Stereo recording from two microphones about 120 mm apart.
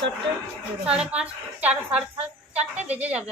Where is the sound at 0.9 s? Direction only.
10° right (ahead or behind).